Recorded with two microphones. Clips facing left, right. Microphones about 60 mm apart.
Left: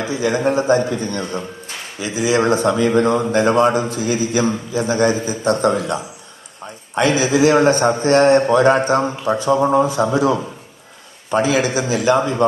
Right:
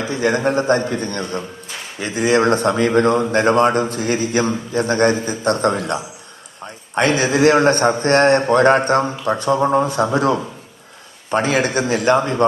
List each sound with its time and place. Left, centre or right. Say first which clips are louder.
0.1 s speech: even; right